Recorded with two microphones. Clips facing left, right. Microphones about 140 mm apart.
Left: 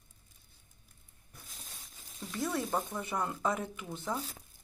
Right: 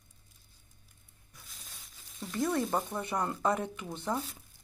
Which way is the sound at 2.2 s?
Centre (ahead or behind).